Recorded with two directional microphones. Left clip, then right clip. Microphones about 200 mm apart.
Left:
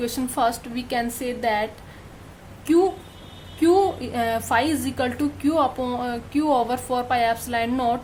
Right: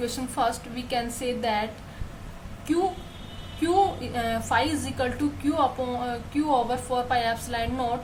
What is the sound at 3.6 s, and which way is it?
A woman's voice, 40° left (ahead or behind).